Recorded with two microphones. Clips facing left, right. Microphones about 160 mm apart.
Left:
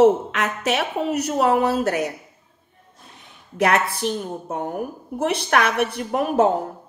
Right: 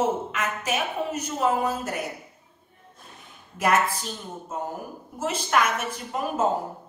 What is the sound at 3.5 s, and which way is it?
Speech, 70° left (ahead or behind).